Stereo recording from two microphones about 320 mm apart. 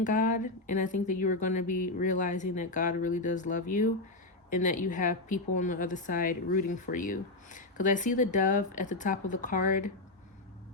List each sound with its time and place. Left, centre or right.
0.0 s speech: left